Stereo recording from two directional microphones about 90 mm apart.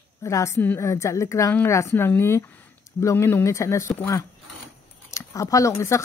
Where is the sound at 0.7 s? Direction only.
30° left (ahead or behind).